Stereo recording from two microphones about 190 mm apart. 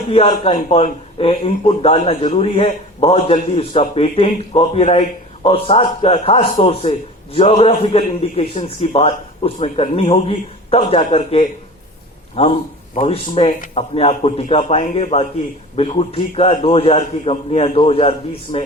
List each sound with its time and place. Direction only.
0.1 s a man's voice: 30° left (ahead or behind)
13.5 s speech: 45° left (ahead or behind)
13.9 s a man's voice: 30° left (ahead or behind)